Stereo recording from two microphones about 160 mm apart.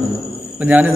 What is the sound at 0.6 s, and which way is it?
Speech, 10° right (ahead or behind).